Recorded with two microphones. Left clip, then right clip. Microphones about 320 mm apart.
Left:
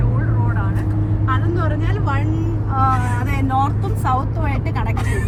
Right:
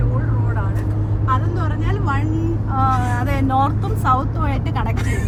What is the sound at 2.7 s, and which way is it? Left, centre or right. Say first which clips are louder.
Vehicle: left 1 dB; right.